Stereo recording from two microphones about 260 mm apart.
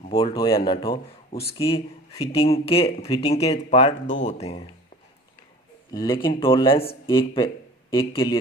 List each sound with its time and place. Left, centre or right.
0.1 s speech: centre
5.9 s speech: centre